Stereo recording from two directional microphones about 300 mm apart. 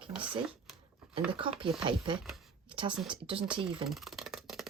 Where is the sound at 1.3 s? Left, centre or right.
Centre.